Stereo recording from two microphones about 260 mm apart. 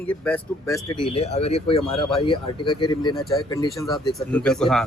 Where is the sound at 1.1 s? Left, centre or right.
Left.